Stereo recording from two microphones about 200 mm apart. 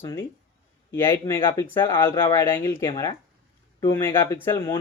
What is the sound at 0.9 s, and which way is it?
Speech, 10° left (ahead or behind).